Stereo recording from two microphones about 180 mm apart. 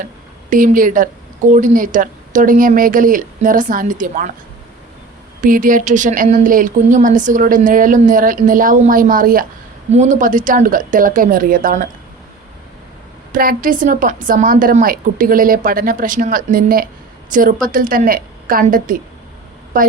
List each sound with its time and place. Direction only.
0.5 s speech: 50° right (ahead or behind)
5.4 s speech: 50° right (ahead or behind)
13.3 s speech: 50° right (ahead or behind)